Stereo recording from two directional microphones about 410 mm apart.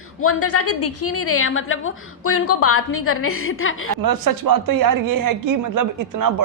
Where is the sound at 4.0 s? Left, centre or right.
Right.